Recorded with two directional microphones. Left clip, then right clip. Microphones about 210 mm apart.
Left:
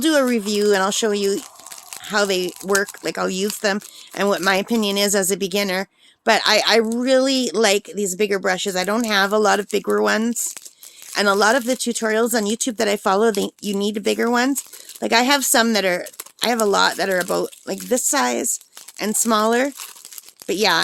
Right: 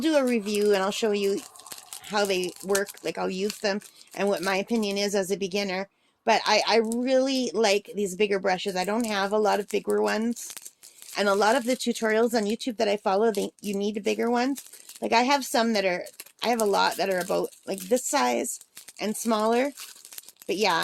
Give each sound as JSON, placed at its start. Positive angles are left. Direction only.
{"t": 0.0, "sound": "speech", "side_deg": 30}